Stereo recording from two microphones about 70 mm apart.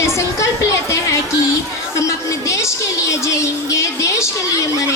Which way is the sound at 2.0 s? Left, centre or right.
Left.